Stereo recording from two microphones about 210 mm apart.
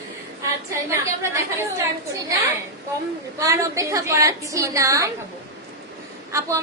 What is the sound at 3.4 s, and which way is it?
A woman's voice, 15° right (ahead or behind).